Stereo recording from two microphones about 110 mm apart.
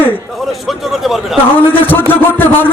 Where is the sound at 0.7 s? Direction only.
Centre (ahead or behind).